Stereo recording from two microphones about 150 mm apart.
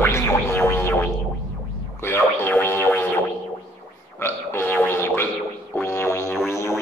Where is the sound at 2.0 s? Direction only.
15° left (ahead or behind).